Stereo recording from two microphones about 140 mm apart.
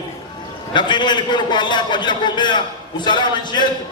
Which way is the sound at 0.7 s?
35° left (ahead or behind).